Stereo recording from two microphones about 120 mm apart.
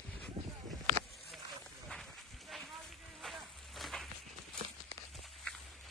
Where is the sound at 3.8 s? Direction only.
Centre (ahead or behind).